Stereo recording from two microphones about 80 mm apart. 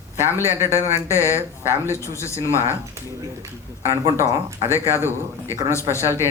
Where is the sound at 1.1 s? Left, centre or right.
Left.